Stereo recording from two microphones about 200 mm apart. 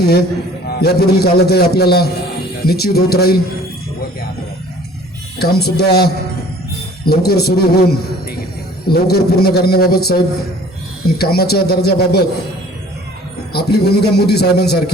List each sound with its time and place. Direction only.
0.0 s a man's voice: 50° left (ahead or behind)
5.4 s a man's voice: 50° left (ahead or behind)
11.2 s a man's voice: 50° left (ahead or behind)
13.5 s a man's voice: 55° left (ahead or behind)